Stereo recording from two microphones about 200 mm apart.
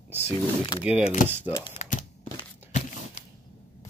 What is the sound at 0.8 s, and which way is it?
Speech, 5° right (ahead or behind).